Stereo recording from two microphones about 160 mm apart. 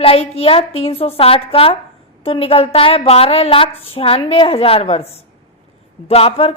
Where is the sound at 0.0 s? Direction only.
40° left (ahead or behind).